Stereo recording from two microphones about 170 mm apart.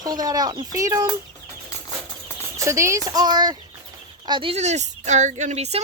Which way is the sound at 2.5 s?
15° right (ahead or behind).